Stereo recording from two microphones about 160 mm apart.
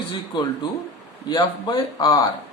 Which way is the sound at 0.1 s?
25° left (ahead or behind).